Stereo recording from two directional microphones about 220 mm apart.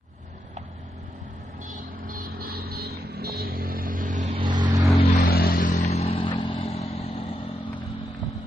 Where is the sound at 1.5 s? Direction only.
35° right (ahead or behind); by 4.8 s 20° right (ahead or behind).